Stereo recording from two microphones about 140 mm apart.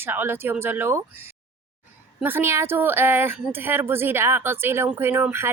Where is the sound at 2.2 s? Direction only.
15° right (ahead or behind).